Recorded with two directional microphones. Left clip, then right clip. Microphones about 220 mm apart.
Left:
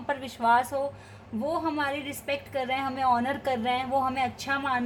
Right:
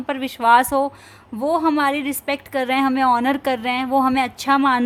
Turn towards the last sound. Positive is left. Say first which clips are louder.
# right 11 dB
turn(degrees=-50)  # may be behind; listen again after turning